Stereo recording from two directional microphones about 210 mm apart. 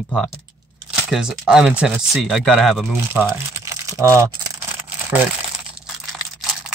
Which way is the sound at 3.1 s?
10° right (ahead or behind).